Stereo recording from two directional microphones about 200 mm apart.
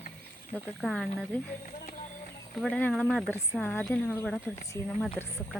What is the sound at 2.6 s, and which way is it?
Speech, 5° left (ahead or behind).